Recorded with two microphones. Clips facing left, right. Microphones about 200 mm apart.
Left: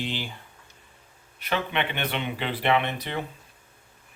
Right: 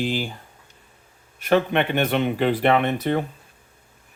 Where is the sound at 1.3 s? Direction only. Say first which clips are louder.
Right 9 dB; 45° right (ahead or behind).